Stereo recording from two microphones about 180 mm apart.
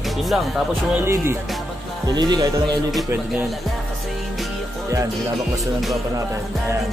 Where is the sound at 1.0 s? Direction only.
15° right (ahead or behind).